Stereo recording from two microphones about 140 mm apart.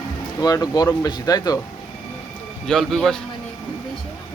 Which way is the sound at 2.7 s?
5° left (ahead or behind).